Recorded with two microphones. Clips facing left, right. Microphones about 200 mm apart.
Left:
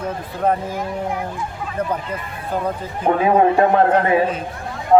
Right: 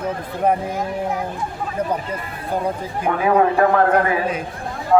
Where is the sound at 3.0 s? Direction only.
25° left (ahead or behind).